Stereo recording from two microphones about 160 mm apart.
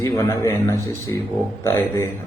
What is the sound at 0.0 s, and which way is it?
Speech, 20° left (ahead or behind).